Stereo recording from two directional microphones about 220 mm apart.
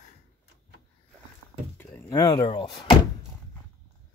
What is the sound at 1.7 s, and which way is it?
Speech, 10° left (ahead or behind).